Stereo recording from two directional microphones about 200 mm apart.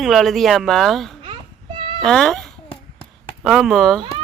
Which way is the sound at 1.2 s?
25° right (ahead or behind).